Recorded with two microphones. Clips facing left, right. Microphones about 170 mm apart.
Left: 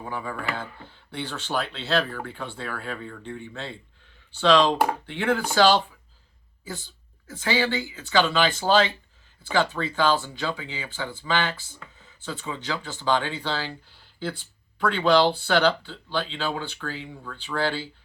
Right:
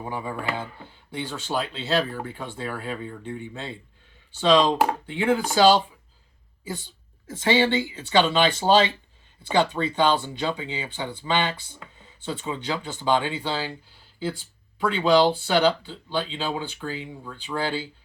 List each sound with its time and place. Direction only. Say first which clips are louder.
0.0 s speech: right 2 dB; 20° right (ahead or behind)
7.3 s speech: right 4 dB; 25° right (ahead or behind)